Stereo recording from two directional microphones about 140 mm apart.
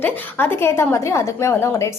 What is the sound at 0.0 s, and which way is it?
A woman's voice, 15° left (ahead or behind).